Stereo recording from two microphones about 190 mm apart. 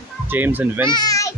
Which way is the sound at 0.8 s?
20° left (ahead or behind).